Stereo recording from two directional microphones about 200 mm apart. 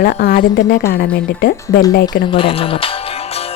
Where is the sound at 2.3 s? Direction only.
25° left (ahead or behind).